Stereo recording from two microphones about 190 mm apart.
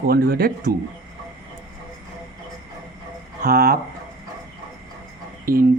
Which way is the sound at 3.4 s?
50° right (ahead or behind).